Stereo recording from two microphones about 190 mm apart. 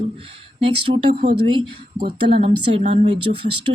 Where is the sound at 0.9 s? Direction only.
45° right (ahead or behind).